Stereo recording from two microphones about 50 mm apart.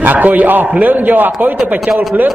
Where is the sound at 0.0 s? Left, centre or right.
Right.